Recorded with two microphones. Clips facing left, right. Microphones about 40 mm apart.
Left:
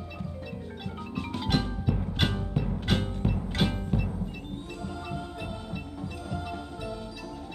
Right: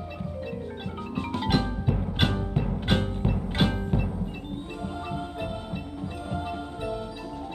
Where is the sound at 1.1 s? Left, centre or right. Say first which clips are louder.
Right 3 dB; centre.